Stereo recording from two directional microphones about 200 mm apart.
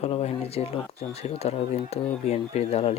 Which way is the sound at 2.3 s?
30° left (ahead or behind).